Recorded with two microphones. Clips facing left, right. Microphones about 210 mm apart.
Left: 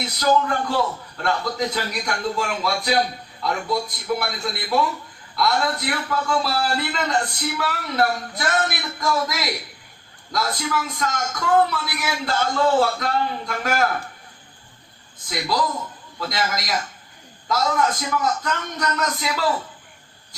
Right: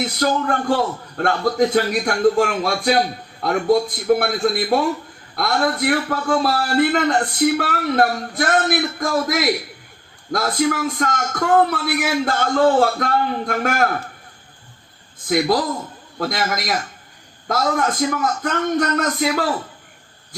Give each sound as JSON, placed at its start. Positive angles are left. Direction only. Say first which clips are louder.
{"t": 0.0, "sound": "a man's voice", "louder": "right 1 dB", "side_deg": -50}
{"t": 15.3, "sound": "a man's voice", "louder": "right 6 dB", "side_deg": -50}